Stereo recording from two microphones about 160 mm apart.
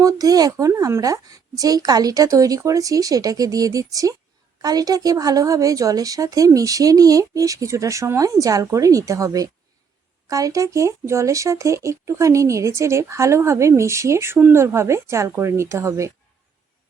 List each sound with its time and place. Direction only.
0.0 s a woman's voice: 20° right (ahead or behind)